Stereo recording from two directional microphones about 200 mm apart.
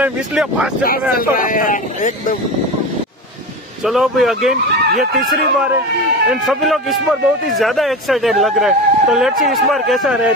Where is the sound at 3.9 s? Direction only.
Centre (ahead or behind).